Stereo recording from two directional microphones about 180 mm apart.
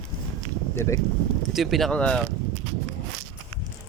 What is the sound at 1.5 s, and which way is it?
Speech, centre (ahead or behind).